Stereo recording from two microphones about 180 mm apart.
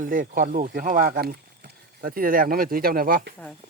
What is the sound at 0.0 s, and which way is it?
Speech, 50° right (ahead or behind).